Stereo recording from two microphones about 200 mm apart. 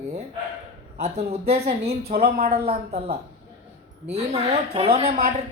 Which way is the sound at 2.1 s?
45° right (ahead or behind).